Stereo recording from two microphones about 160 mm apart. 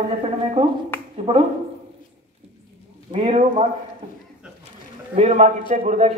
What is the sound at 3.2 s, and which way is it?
Speech, 45° right (ahead or behind).